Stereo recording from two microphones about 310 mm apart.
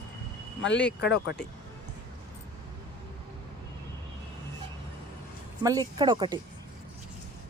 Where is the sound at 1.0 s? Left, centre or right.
Left.